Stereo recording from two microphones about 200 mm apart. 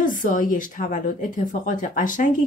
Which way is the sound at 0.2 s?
40° left (ahead or behind).